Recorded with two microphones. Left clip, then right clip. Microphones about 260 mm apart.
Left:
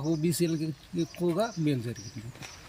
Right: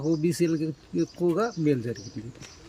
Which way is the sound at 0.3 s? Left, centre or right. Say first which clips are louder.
Right 3 dB; right.